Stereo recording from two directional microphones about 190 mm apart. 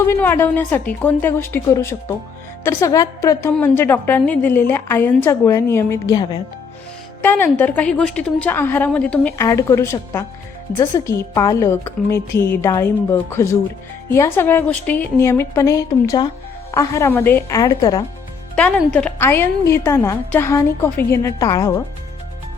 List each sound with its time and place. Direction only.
0.0 s a woman's voice: 10° left (ahead or behind)
7.2 s a woman's voice: 10° left (ahead or behind)
18.9 s a woman's voice: 10° left (ahead or behind)